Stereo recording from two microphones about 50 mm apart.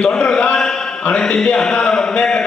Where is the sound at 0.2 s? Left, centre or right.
Centre.